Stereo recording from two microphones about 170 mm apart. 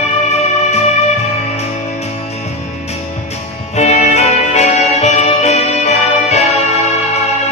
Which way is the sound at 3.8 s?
40° left (ahead or behind).